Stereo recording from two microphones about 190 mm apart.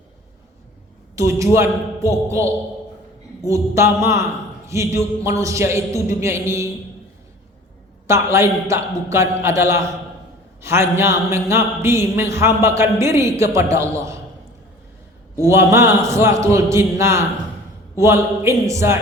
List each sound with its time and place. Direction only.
1.1 s a man's voice: 15° right (ahead or behind)
8.0 s a man's voice: 15° right (ahead or behind)
15.4 s a man's voice: 15° right (ahead or behind)